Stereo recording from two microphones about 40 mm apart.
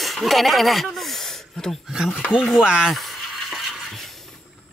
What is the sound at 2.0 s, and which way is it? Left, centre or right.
Speech, left.